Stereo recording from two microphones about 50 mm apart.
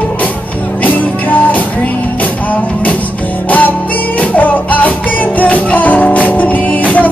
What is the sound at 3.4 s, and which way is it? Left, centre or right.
Music, left.